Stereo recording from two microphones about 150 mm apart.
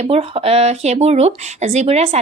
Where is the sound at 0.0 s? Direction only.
40° right (ahead or behind).